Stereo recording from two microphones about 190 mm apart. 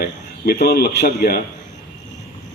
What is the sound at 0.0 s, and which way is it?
A man's voice, 55° left (ahead or behind).